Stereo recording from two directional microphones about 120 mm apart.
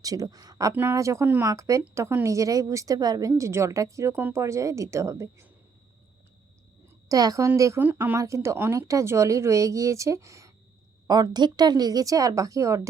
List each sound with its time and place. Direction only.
0.0 s a woman's voice: 30° right (ahead or behind)
0.7 s a woman's voice: 15° right (ahead or behind)
7.1 s a woman's voice: 30° right (ahead or behind)